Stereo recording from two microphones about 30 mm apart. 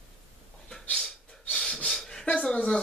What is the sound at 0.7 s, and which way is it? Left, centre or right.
Gasp, centre.